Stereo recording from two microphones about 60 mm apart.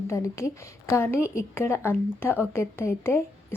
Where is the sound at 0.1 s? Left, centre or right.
Left.